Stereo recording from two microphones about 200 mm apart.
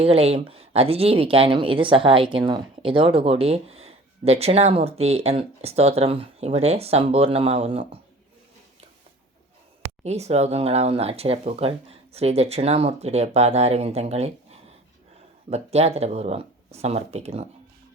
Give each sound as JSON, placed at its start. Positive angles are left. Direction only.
{"t": 0.0, "sound": "speech", "side_deg": -30}
{"t": 10.0, "sound": "speech", "side_deg": -35}
{"t": 15.4, "sound": "speech", "side_deg": -30}